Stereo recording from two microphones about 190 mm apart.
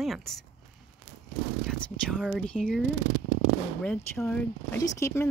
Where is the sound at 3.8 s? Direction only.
10° left (ahead or behind).